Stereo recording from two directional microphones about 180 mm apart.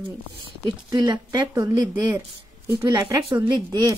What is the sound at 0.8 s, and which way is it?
Speech, 25° right (ahead or behind).